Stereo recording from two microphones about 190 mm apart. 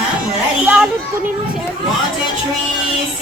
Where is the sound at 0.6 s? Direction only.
5° right (ahead or behind).